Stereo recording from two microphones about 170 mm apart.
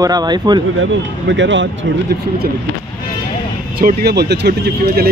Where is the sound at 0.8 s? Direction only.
90° right.